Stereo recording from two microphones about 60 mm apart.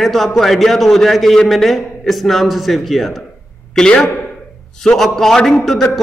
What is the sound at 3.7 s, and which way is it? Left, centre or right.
A man's voice, centre.